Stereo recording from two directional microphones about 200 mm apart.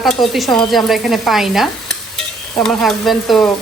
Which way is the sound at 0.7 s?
Centre (ahead or behind).